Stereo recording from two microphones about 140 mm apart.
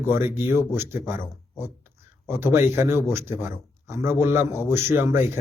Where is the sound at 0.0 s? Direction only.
15° right (ahead or behind).